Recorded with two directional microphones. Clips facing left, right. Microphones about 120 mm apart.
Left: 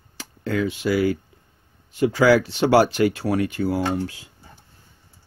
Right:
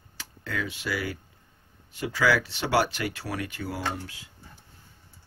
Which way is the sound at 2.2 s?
40° left (ahead or behind).